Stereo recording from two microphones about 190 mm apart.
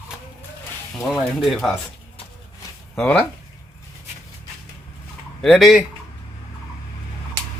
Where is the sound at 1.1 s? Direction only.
Centre (ahead or behind).